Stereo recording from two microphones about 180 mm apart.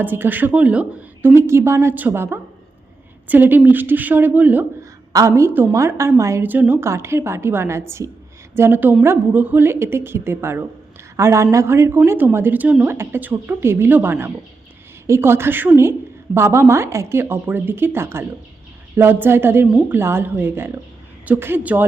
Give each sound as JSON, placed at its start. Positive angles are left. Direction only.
{"t": 0.0, "sound": "speech", "side_deg": -10}